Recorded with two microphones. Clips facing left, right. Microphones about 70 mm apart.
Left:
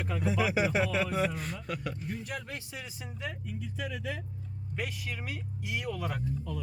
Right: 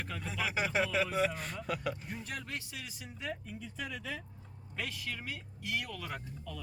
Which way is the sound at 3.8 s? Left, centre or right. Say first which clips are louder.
Left 3 dB; centre.